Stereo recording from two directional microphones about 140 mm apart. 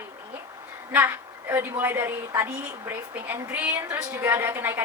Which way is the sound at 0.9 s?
15° right (ahead or behind).